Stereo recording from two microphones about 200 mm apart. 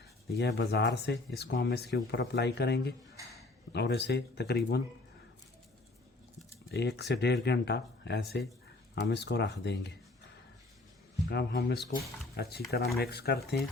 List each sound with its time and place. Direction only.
0.3 s speech: 55° left (ahead or behind)
6.7 s speech: 55° left (ahead or behind)
11.3 s speech: 55° left (ahead or behind)